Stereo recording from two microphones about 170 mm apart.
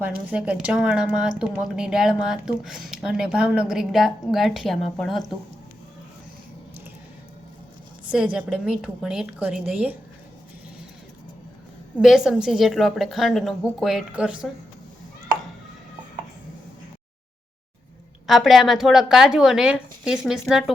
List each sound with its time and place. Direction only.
0.0 s speech: 5° right (ahead or behind)
8.1 s speech: 5° right (ahead or behind)
11.9 s speech: 5° right (ahead or behind)
18.3 s speech: centre (ahead or behind)